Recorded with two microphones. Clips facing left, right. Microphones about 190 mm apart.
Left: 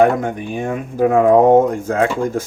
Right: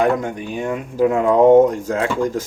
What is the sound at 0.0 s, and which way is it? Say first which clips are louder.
Speech: left 4 dB; 50° left (ahead or behind).